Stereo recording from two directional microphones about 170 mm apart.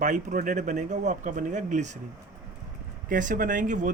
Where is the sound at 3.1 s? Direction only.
50° right (ahead or behind).